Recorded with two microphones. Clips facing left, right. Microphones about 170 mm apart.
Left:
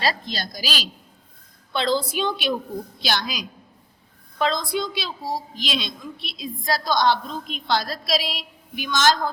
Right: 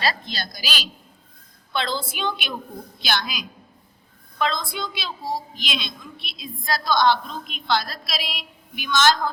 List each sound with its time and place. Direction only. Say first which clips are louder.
0.0 s a woman's voice: left 1 dB; 40° left (ahead or behind)